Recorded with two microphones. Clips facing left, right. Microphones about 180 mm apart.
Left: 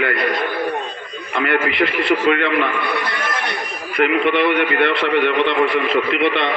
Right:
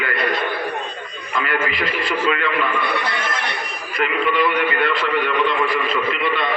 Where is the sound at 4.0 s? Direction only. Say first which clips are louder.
Left 4 dB; 65° left (ahead or behind).